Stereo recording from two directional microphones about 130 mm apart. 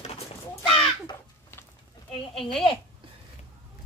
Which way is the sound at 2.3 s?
Centre (ahead or behind).